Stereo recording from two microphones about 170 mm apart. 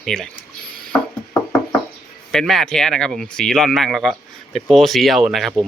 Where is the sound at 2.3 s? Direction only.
Centre (ahead or behind).